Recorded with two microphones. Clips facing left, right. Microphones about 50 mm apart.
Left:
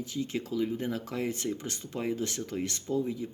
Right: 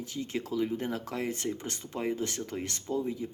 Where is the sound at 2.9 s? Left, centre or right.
Right.